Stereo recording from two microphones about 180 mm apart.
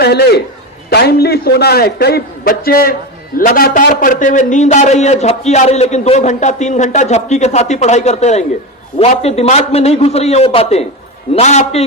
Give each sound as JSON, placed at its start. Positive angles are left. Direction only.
{"t": 0.0, "sound": "a man's voice", "side_deg": 65}